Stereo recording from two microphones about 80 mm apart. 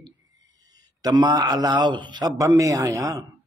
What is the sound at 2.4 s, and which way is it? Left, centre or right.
Speech, right.